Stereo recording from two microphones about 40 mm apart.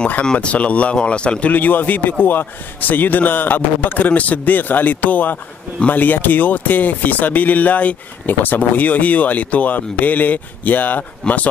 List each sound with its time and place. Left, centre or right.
0.2 s a man's voice: left
1.5 s speech: left